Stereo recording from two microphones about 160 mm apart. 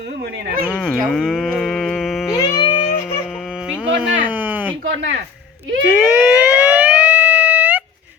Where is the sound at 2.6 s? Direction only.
35° left (ahead or behind).